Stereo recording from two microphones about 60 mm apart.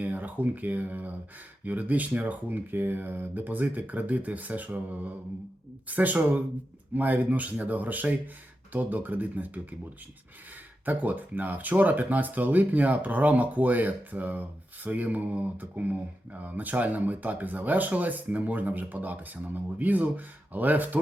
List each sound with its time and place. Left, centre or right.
0.0 s speech: right
10.8 s speech: right